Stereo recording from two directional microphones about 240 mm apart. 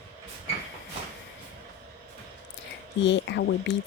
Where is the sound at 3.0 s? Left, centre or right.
Left.